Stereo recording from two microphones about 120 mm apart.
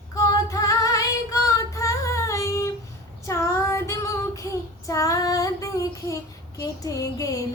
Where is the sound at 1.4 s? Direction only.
25° left (ahead or behind).